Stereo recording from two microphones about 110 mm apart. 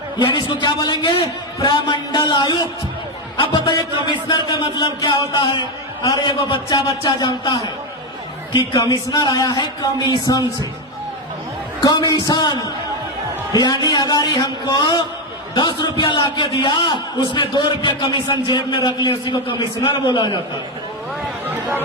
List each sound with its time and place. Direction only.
0.2 s a man's voice: 45° left (ahead or behind)
11.8 s a man's voice: 40° left (ahead or behind)